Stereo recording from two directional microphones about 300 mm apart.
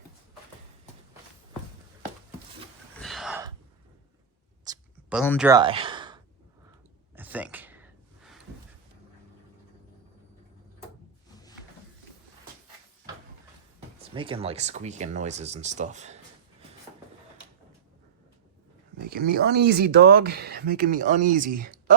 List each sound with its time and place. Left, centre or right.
3.0 s gasp: centre
4.6 s a sound: centre
5.1 s speech: centre
5.5 s sigh: centre
7.2 s a sound: centre
14.0 s speech: centre
19.1 s speech: right